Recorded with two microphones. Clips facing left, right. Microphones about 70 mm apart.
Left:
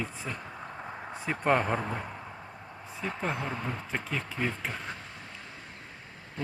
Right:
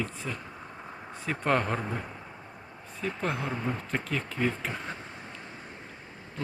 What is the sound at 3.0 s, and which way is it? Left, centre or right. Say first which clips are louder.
Speech: right 1 dB; centre.